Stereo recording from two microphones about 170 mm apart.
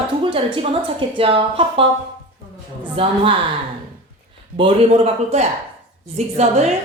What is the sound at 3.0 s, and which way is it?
Speech, 30° right (ahead or behind).